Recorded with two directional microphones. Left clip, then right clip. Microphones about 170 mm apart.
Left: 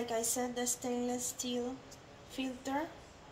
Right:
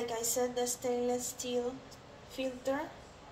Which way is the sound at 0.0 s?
40° left (ahead or behind).